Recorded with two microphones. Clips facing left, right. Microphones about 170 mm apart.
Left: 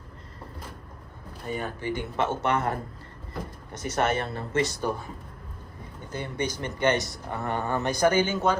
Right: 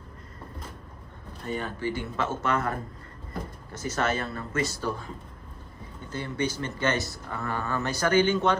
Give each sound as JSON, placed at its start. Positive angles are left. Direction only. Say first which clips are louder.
{"t": 1.5, "sound": "speech", "louder": "even", "side_deg": 10}
{"t": 3.9, "sound": "speech", "louder": "left 2 dB", "side_deg": 25}
{"t": 4.8, "sound": "speech", "louder": "left 2 dB", "side_deg": 10}
{"t": 6.1, "sound": "speech", "louder": "right 1 dB", "side_deg": 15}